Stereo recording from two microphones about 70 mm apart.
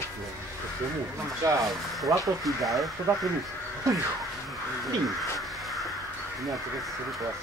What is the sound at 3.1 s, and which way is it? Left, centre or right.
Speech, right.